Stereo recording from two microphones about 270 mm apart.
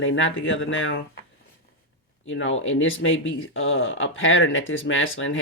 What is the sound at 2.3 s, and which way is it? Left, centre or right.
Speech, left.